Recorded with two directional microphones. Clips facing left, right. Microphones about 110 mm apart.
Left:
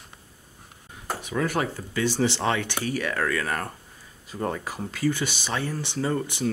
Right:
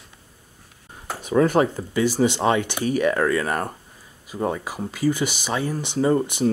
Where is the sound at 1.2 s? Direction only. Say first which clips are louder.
Right 9 dB; 30° right (ahead or behind).